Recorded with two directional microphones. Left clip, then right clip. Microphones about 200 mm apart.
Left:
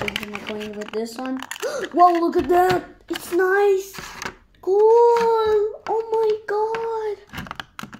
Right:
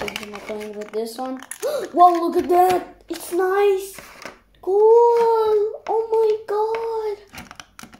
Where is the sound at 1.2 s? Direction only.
25° left (ahead or behind).